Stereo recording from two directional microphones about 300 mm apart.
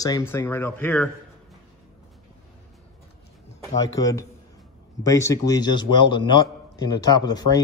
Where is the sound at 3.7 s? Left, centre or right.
Centre.